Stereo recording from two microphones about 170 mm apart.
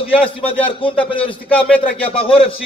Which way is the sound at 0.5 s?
30° left (ahead or behind).